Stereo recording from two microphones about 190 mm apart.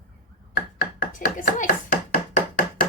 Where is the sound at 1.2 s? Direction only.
45° left (ahead or behind).